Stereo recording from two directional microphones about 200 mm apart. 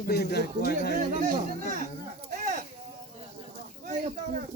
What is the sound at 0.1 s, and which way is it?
Speech, 55° left (ahead or behind).